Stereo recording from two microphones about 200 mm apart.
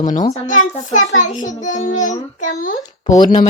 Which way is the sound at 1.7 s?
40° left (ahead or behind).